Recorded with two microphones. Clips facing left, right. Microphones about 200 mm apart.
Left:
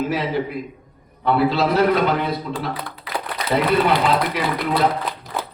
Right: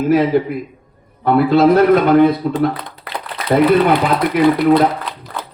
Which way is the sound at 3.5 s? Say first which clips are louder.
Right 6 dB; 50° right (ahead or behind).